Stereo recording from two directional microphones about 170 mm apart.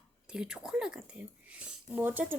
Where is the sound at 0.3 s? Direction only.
5° right (ahead or behind).